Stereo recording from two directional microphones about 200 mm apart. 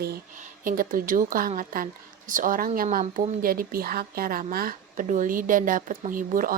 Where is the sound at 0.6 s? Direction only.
45° right (ahead or behind).